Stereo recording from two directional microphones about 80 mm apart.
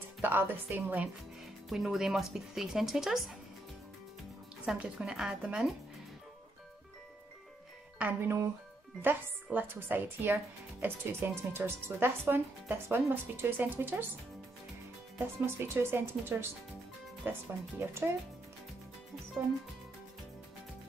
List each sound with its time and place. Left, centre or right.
0.2 s speech: right
1.7 s speech: centre
4.7 s speech: centre
8.0 s speech: right
15.4 s speech: right